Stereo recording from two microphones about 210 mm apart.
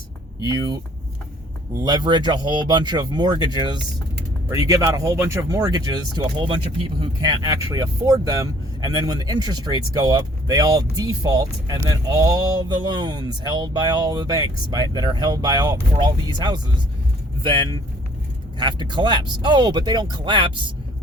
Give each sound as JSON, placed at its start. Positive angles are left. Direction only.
{"t": 0.4, "sound": "speech", "side_deg": -20}
{"t": 1.8, "sound": "speech", "side_deg": -20}